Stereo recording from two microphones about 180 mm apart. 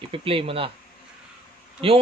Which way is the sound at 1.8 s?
30° right (ahead or behind).